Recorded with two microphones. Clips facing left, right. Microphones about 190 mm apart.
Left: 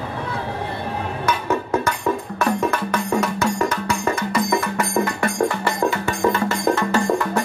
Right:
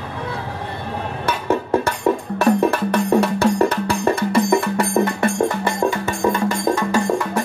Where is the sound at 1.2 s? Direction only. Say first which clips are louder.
Right 2 dB; 30° right (ahead or behind).